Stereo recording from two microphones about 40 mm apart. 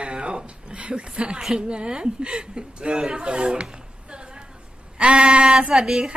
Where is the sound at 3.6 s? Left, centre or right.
Right.